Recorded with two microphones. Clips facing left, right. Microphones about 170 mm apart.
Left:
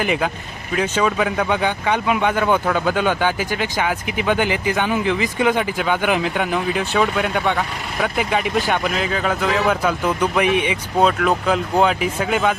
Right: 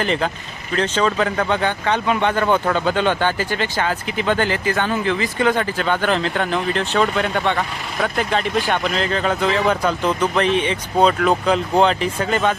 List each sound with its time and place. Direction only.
0.0 s speech: 10° left (ahead or behind)